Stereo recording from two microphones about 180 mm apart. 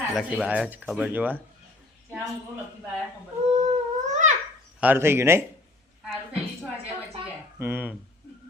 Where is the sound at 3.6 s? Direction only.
40° right (ahead or behind).